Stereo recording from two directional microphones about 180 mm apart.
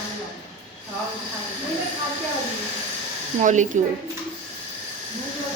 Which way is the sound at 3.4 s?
40° right (ahead or behind).